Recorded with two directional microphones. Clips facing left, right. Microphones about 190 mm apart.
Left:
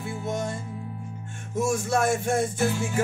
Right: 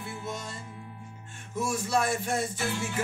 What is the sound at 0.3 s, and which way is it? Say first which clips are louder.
Music: left 11 dB; 50° left (ahead or behind).